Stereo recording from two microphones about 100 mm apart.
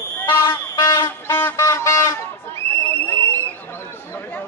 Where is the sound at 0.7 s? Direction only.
35° left (ahead or behind).